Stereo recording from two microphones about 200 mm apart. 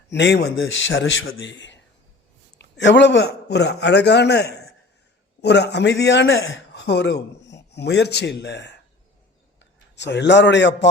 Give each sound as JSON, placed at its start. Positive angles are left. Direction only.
{"t": 0.1, "sound": "a man's voice", "side_deg": 60}
{"t": 9.9, "sound": "a man's voice", "side_deg": 60}